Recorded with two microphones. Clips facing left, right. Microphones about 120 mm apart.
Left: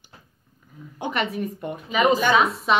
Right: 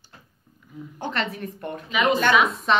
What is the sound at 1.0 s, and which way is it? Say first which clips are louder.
A woman's voice: left 3 dB; 10° left (ahead or behind).